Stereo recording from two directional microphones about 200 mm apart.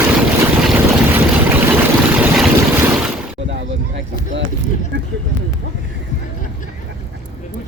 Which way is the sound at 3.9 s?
65° right (ahead or behind).